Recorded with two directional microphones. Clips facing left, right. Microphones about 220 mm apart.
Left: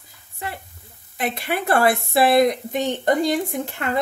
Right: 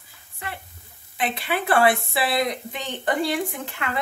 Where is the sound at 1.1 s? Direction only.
45° left (ahead or behind).